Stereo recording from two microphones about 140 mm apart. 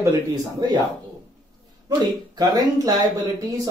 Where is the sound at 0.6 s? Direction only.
30° right (ahead or behind).